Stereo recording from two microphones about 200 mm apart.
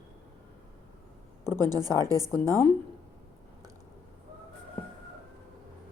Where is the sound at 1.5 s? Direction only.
20° right (ahead or behind).